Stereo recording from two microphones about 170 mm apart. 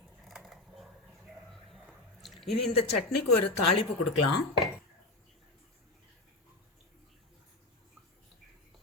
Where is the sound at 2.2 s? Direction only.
Centre (ahead or behind).